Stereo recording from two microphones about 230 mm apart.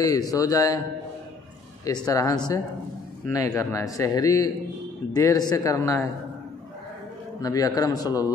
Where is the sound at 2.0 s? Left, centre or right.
Centre.